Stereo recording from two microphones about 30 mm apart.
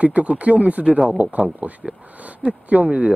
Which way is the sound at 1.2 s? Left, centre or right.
Right.